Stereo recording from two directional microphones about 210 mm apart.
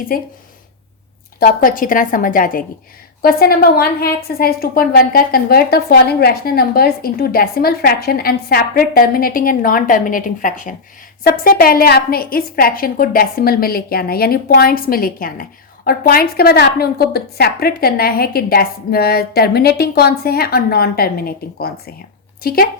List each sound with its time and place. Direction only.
0.1 s a woman's voice: 45° left (ahead or behind)
1.4 s a woman's voice: 40° left (ahead or behind)